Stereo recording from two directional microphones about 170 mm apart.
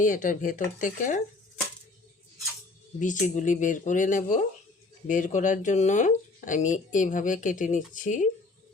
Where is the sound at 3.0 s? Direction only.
45° left (ahead or behind).